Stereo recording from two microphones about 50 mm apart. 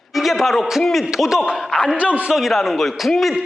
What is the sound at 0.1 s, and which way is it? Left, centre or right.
Speech, centre.